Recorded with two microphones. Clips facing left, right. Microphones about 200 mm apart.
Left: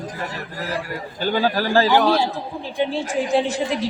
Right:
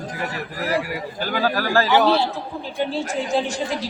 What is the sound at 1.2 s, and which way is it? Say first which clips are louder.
Speech: left 3 dB; 30° left (ahead or behind).